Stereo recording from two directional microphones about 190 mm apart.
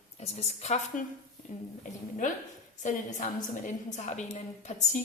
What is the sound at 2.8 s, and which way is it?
A woman's voice, 40° left (ahead or behind).